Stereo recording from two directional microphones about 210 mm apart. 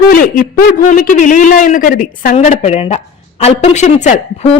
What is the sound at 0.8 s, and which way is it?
A man's voice, 40° left (ahead or behind).